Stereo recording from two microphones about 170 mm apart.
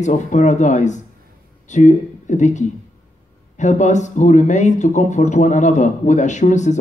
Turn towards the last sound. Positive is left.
turn(degrees=45)  # may be behind; listen again after turning